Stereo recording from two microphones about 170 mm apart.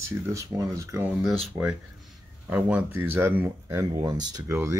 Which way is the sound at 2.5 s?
10° right (ahead or behind).